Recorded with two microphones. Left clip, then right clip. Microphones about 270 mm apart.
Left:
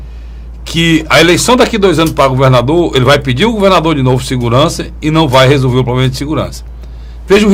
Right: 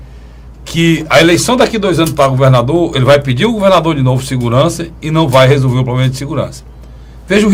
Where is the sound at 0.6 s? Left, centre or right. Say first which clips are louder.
Left 2 dB; left.